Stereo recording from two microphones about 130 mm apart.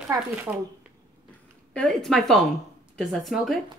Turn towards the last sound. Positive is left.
turn(degrees=0)  # may be behind; listen again after turning